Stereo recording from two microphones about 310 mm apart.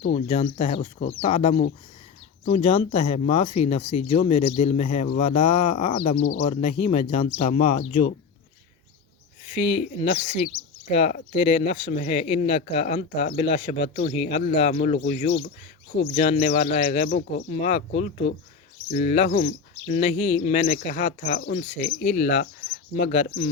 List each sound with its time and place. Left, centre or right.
0.0 s speech: left
9.6 s speech: centre